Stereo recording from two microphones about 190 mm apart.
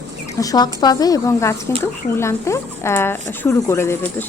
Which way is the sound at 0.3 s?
20° left (ahead or behind).